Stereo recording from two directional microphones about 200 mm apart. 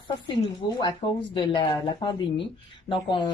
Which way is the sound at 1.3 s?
25° left (ahead or behind).